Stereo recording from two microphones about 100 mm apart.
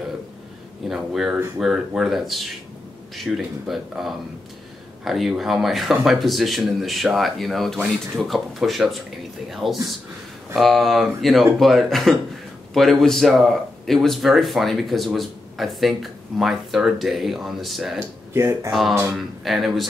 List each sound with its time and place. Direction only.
0.8 s speech: 5° right (ahead or behind)
18.3 s speech: 30° right (ahead or behind)
18.7 s speech: centre (ahead or behind)